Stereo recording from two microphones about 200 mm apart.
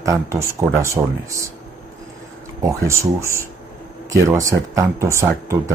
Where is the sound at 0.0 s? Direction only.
15° right (ahead or behind).